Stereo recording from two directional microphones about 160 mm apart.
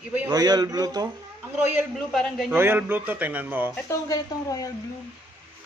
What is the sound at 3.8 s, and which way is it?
Speech, 20° left (ahead or behind).